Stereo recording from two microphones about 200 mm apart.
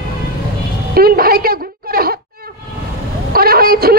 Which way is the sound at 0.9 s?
50° right (ahead or behind).